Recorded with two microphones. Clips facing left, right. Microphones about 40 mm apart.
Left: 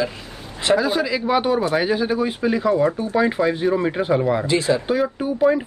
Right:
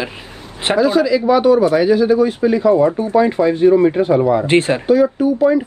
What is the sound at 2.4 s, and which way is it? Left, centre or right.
Speech, centre.